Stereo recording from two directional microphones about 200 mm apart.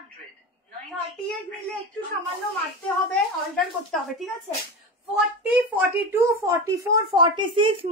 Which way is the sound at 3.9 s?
Centre (ahead or behind).